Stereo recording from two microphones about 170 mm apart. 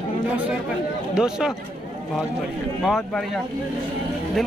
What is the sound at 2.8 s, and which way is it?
Speech, centre (ahead or behind).